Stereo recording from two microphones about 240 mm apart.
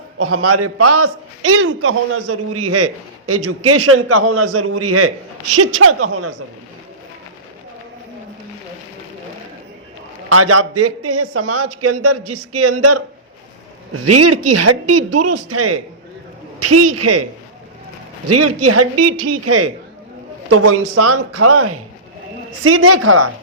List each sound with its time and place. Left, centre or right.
0.2 s a man's voice: right
10.2 s a man's voice: right
18.3 s a man's voice: right